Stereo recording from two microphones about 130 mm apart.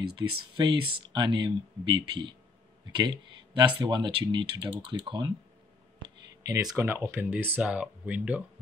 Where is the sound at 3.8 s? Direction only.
35° right (ahead or behind); by 8.4 s 10° right (ahead or behind).